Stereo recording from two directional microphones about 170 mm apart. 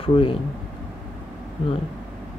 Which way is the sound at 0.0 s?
30° left (ahead or behind).